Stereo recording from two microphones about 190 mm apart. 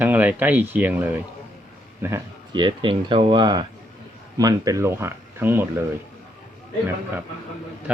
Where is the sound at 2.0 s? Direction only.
20° right (ahead or behind).